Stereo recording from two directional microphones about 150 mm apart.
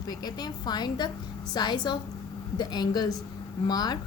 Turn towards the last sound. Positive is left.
turn(degrees=25)  # may be behind; listen again after turning